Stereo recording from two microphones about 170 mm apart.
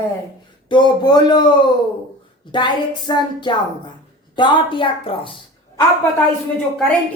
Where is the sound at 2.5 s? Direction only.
25° left (ahead or behind).